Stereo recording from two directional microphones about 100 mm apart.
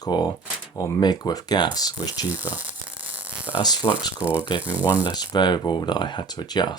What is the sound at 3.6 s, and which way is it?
Speech, 45° left (ahead or behind).